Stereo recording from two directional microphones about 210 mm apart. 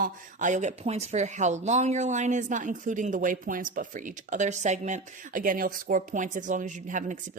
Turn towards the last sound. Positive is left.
turn(degrees=-35)  # may be behind; listen again after turning